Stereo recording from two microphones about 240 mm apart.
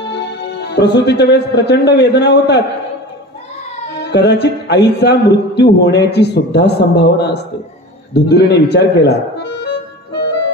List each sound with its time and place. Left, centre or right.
0.0 s music: left
1.0 s a man's voice: left
4.0 s a man's voice: left
9.4 s music: left